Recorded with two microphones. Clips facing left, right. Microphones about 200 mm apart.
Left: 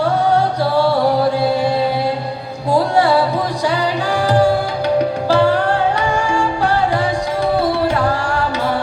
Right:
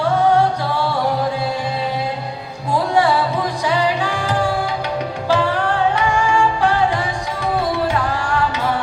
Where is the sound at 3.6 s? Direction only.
40° left (ahead or behind).